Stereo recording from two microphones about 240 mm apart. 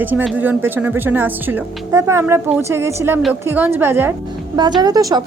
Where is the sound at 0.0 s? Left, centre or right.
Centre.